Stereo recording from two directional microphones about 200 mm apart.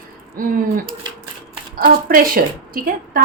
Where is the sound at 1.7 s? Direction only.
45° right (ahead or behind).